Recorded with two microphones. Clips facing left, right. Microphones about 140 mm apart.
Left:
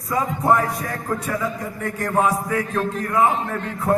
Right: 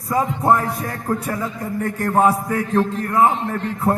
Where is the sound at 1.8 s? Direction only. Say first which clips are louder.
Right 4 dB; 35° right (ahead or behind).